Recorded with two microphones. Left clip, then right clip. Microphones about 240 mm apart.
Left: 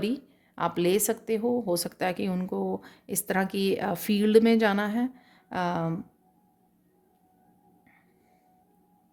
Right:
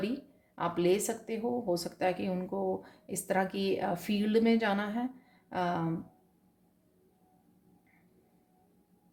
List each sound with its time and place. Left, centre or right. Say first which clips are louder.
0.5 s speech: left 4 dB; left